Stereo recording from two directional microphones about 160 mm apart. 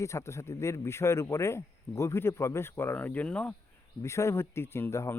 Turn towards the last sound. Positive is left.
turn(degrees=15)  # may be behind; listen again after turning